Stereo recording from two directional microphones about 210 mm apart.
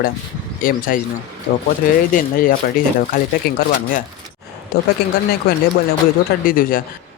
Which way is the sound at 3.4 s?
45° left (ahead or behind).